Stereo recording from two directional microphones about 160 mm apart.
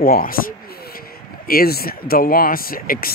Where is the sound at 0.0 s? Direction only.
65° left (ahead or behind).